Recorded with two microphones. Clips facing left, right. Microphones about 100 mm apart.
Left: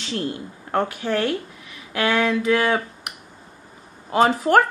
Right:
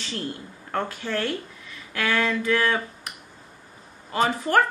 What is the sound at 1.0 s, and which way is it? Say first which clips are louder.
A woman's voice: left 5 dB; 10° left (ahead or behind).